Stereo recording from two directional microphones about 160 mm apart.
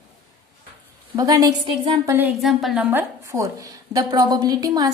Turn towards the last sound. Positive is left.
turn(degrees=-25)  # may be behind; listen again after turning